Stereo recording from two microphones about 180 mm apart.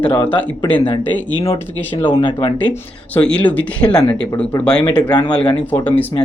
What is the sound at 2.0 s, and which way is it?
Speech, 25° left (ahead or behind).